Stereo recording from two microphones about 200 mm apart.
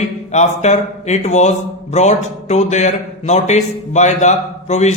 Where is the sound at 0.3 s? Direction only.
35° left (ahead or behind).